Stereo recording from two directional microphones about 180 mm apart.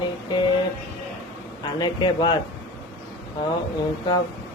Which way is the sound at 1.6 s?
25° left (ahead or behind).